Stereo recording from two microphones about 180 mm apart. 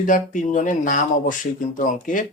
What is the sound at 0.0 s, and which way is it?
Speech, 45° left (ahead or behind).